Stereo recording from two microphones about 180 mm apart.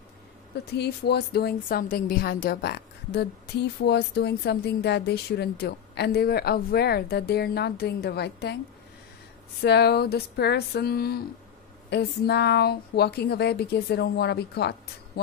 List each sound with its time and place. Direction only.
0.7 s speech: 65° left (ahead or behind)
9.6 s speech: 65° left (ahead or behind)